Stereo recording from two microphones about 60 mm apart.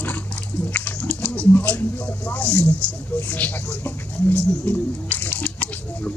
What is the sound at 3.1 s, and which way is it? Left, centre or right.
Bird, left.